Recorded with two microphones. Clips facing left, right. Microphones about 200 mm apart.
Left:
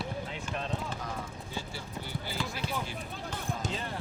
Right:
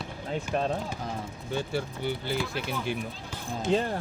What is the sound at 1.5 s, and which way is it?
Speech, 60° right (ahead or behind).